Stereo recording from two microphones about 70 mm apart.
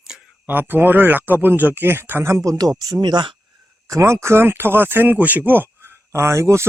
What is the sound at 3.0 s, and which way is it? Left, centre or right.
Speech, right.